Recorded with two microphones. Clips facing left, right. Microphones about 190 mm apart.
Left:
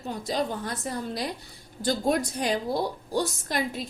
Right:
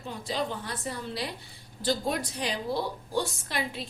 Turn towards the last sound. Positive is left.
turn(degrees=40)  # may be behind; listen again after turning